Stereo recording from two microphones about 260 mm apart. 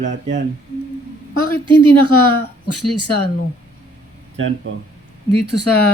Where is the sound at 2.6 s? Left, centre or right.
Left.